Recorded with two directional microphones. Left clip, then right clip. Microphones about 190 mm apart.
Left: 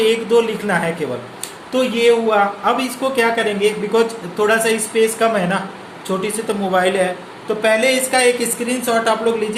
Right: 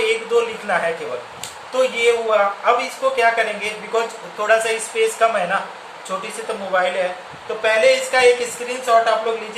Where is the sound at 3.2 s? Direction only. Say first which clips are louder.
Left 2 dB; 45° left (ahead or behind).